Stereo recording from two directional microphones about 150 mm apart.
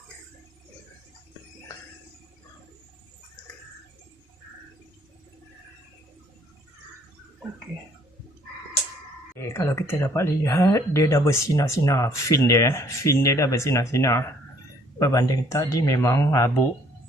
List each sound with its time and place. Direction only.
9.3 s speech: 20° left (ahead or behind)